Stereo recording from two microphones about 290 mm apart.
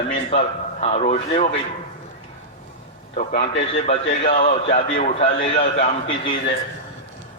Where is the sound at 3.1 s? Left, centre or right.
Left.